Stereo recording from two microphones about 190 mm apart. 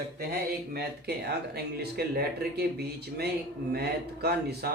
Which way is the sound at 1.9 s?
55° right (ahead or behind).